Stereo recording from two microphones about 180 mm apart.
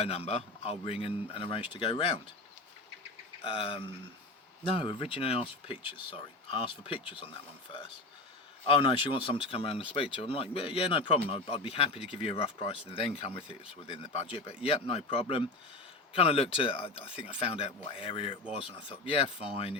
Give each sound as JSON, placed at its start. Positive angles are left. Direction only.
{"t": 0.0, "sound": "speech", "side_deg": 35}
{"t": 3.4, "sound": "speech", "side_deg": 30}